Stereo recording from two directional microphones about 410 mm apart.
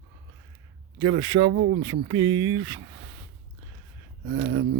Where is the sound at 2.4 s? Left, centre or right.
Right.